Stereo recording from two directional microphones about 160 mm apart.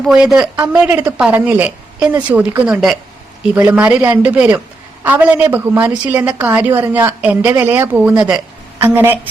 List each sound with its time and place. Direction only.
0.1 s a woman's voice: 5° right (ahead or behind)